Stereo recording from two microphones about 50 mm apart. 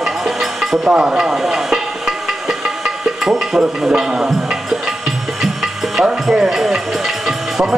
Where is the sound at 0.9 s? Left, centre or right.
Centre.